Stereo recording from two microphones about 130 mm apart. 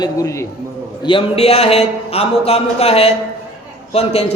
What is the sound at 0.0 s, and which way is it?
Speech, 25° left (ahead or behind).